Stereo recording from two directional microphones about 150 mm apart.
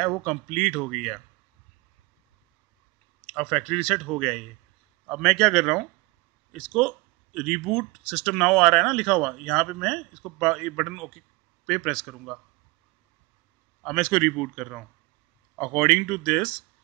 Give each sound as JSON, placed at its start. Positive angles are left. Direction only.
{"t": 0.0, "sound": "speech", "side_deg": 5}
{"t": 3.3, "sound": "speech", "side_deg": 5}
{"t": 13.8, "sound": "speech", "side_deg": 5}